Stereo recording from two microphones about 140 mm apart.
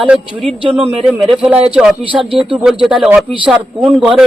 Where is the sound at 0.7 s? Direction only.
5° right (ahead or behind).